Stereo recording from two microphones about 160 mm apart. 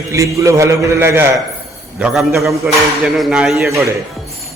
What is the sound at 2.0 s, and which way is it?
Speech, centre (ahead or behind).